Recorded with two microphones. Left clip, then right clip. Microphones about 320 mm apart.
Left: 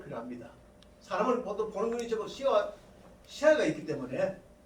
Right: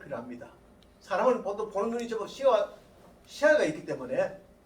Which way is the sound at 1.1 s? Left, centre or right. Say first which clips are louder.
Right 3 dB; centre.